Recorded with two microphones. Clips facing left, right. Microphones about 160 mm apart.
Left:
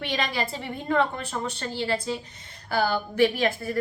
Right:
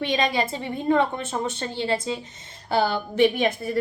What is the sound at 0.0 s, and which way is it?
Speech, 20° right (ahead or behind).